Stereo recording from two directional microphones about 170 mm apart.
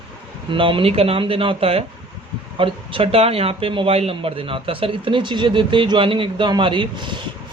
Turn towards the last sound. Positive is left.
turn(degrees=-30)  # may be behind; listen again after turning